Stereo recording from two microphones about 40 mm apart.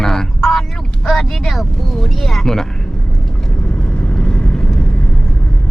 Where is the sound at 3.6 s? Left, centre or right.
Left.